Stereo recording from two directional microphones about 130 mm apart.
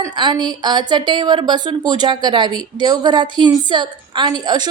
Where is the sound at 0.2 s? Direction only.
35° right (ahead or behind).